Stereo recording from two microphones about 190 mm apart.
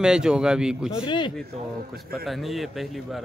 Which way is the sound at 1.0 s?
25° left (ahead or behind).